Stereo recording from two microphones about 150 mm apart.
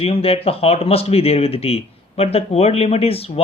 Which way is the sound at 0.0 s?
40° left (ahead or behind).